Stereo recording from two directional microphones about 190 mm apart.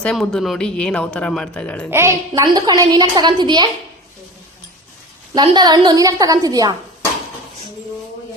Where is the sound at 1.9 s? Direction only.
15° right (ahead or behind).